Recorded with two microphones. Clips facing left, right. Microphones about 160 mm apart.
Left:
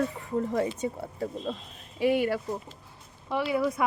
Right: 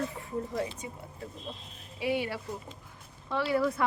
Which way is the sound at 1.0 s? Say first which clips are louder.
Left 10 dB; 90° left.